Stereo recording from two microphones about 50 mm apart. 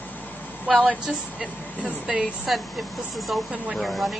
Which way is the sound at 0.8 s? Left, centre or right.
Centre.